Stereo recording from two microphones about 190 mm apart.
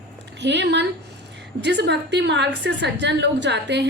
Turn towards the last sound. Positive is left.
turn(degrees=-65)  # may be behind; listen again after turning